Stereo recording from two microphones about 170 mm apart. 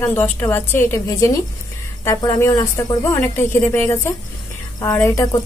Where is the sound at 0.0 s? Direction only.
15° left (ahead or behind).